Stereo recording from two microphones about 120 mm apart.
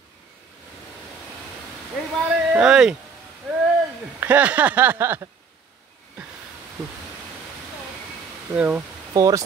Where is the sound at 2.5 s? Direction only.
5° right (ahead or behind).